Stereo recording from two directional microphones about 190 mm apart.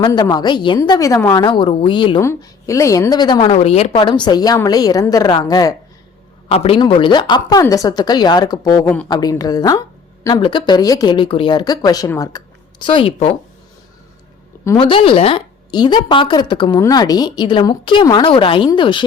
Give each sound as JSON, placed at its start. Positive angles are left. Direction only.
{"t": 0.0, "sound": "speech", "side_deg": 25}
{"t": 3.5, "sound": "speech", "side_deg": 35}
{"t": 6.5, "sound": "speech", "side_deg": 30}
{"t": 14.8, "sound": "speech", "side_deg": 25}